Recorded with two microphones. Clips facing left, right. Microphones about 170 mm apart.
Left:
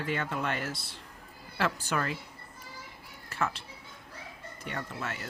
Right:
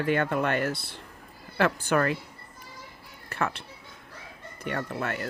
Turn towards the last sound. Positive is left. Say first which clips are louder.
# right 6 dB
turn(degrees=-60)  # may be behind; listen again after turning